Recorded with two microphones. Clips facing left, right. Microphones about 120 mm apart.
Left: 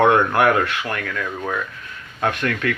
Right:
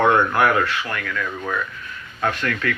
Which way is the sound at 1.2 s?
25° left (ahead or behind).